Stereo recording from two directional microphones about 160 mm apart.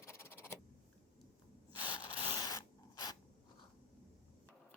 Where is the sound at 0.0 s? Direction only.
15° left (ahead or behind).